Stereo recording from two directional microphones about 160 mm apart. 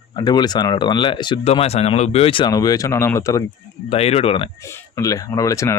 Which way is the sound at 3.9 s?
40° left (ahead or behind).